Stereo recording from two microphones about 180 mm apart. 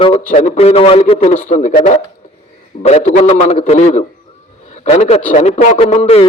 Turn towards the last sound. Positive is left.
turn(degrees=35)  # may be behind; listen again after turning